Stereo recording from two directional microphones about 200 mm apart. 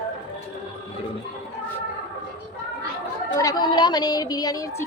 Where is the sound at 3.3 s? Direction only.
15° left (ahead or behind).